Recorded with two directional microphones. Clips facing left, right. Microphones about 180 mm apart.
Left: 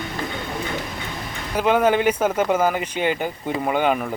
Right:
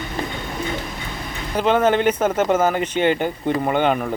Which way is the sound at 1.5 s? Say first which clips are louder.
Right 1 dB; 5° left (ahead or behind).